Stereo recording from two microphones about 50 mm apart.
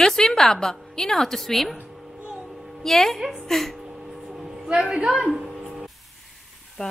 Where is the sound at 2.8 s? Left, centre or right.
Centre.